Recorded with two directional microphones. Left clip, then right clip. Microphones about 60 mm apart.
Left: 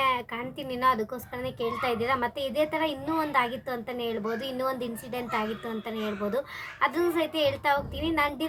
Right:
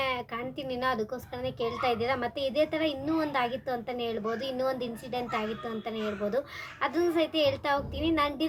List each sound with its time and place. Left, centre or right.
0.0 s a woman's voice: left